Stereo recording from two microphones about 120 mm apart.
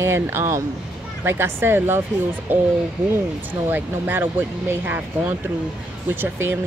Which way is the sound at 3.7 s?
15° right (ahead or behind).